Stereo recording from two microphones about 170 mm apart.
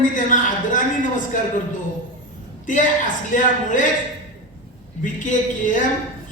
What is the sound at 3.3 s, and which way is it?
Speech, 50° left (ahead or behind).